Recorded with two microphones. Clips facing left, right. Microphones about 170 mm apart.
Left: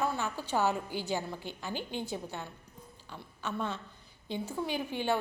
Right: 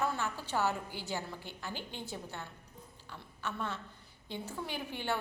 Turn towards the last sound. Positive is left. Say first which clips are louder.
# left 5 dB
turn(degrees=15)  # may be behind; listen again after turning